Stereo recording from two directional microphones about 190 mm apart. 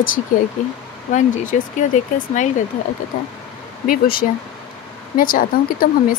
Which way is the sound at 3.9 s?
50° left (ahead or behind).